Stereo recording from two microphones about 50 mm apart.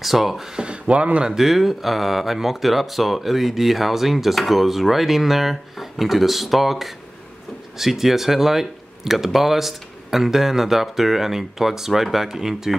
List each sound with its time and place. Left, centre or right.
0.0 s speech: centre
0.6 s speech: right
1.2 s speech: centre